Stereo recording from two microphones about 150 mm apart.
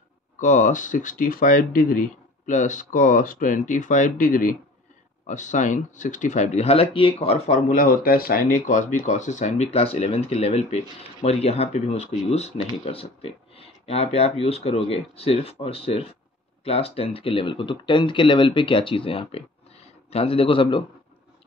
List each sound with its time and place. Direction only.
0.4 s speech: 60° left (ahead or behind)
5.2 s speech: 55° left (ahead or behind); by 20.8 s 35° left (ahead or behind)